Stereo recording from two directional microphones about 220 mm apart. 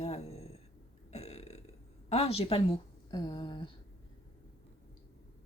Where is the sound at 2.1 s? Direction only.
30° left (ahead or behind).